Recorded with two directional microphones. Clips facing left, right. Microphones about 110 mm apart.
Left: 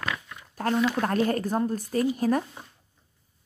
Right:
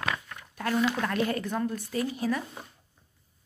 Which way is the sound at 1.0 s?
40° left (ahead or behind).